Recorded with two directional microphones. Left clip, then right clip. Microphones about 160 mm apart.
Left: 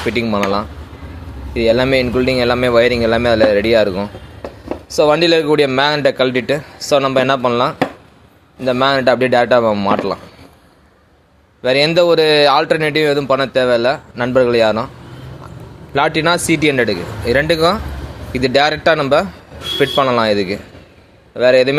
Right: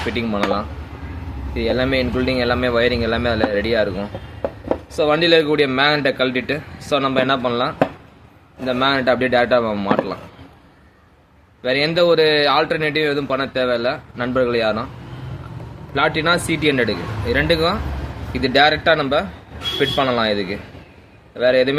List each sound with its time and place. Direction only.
0.1 s speech: 50° left (ahead or behind)
11.6 s speech: 45° left (ahead or behind)
16.0 s speech: 45° left (ahead or behind)